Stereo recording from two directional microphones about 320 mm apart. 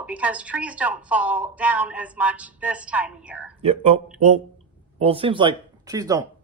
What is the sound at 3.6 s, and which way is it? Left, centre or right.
Speech, centre.